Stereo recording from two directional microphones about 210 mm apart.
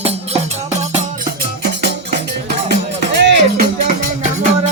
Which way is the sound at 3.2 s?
55° right (ahead or behind).